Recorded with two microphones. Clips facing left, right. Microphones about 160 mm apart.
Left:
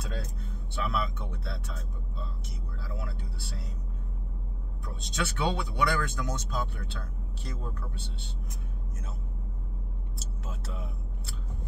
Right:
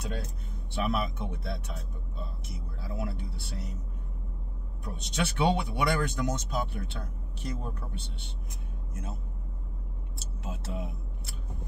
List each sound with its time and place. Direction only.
0.8 s speech: 20° right (ahead or behind)
2.8 s speech: 20° right (ahead or behind)
5.0 s speech: 20° right (ahead or behind)
10.4 s speech: 20° right (ahead or behind)